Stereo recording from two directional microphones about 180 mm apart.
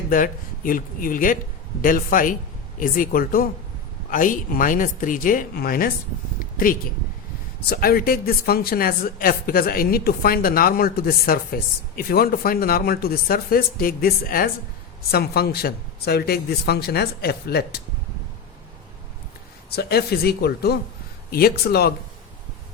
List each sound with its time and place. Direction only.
0.1 s speech: 50° left (ahead or behind)
6.4 s a sound: 50° left (ahead or behind)
7.7 s a woman's voice: 55° left (ahead or behind)
19.7 s a woman's voice: 60° left (ahead or behind)